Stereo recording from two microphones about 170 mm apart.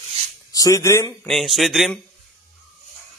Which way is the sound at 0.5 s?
20° left (ahead or behind).